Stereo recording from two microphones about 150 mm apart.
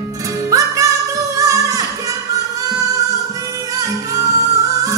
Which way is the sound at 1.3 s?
20° right (ahead or behind).